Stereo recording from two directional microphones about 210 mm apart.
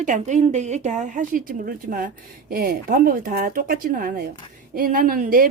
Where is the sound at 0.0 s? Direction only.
35° right (ahead or behind).